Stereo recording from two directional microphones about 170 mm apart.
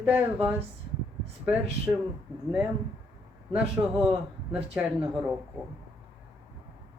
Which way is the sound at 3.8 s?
15° right (ahead or behind).